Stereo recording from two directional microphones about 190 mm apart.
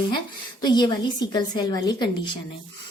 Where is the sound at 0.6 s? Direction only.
20° left (ahead or behind).